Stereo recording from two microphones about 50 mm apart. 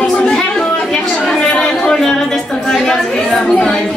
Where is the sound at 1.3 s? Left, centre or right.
Centre.